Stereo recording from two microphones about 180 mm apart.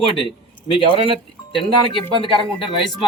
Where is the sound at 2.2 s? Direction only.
30° left (ahead or behind).